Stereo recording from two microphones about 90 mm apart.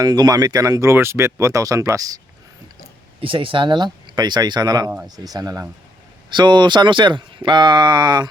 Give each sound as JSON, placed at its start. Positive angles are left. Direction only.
{"t": 0.0, "sound": "speech", "side_deg": -45}
{"t": 3.2, "sound": "speech", "side_deg": -75}
{"t": 4.1, "sound": "speech", "side_deg": -50}
{"t": 6.3, "sound": "speech", "side_deg": -60}